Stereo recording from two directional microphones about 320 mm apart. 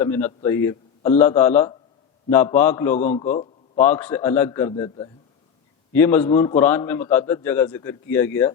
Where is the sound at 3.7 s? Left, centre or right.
Centre.